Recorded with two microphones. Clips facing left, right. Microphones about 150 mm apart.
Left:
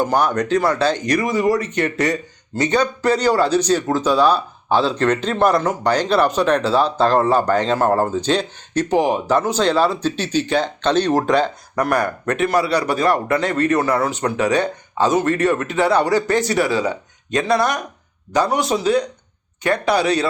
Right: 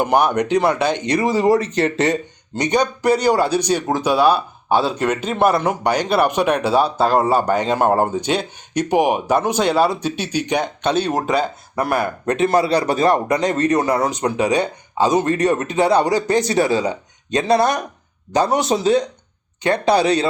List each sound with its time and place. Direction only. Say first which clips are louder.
0.0 s speech: right 2 dB; 15° right (ahead or behind)
2.6 s speech: even; 15° right (ahead or behind)
12.2 s speech: right 2 dB; 25° right (ahead or behind)